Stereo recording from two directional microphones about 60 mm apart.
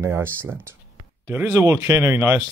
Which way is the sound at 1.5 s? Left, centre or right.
Right.